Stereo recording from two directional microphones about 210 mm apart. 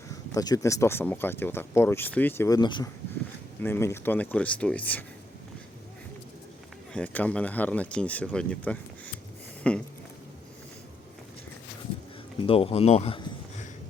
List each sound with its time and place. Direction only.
0.1 s speech: 15° left (ahead or behind)
6.9 s speech: 5° left (ahead or behind)
9.7 s a sound: 5° left (ahead or behind)
12.4 s speech: 25° left (ahead or behind)